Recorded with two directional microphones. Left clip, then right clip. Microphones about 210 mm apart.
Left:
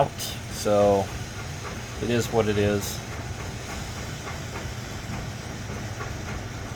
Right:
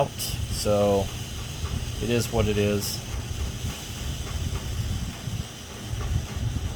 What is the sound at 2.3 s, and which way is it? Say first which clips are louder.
Speech: left 5 dB; 45° right (ahead or behind).